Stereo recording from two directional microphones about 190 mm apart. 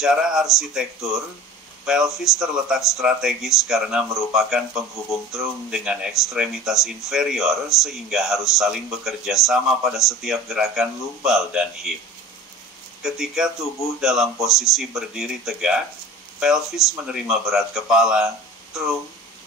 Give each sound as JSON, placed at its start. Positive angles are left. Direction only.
{"t": 0.0, "sound": "speech", "side_deg": 0}
{"t": 13.0, "sound": "speech", "side_deg": 0}